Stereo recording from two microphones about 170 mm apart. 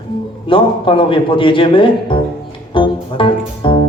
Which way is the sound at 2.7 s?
30° left (ahead or behind).